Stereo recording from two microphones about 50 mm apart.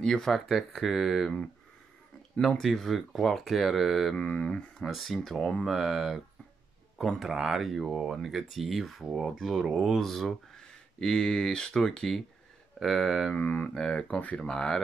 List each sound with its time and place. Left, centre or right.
0.0 s speech: centre
0.5 s speech: centre
2.4 s speech: centre
4.2 s speech: left
4.8 s speech: centre
9.9 s speech: centre
13.7 s speech: centre
14.5 s speech: centre